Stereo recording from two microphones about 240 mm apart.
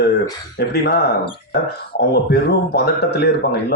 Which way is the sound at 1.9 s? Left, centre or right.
Left.